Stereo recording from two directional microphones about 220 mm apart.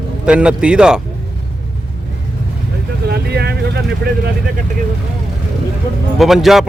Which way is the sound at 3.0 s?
50° right (ahead or behind).